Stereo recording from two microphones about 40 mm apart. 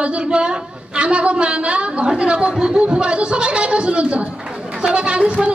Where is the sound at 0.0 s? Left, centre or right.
Right.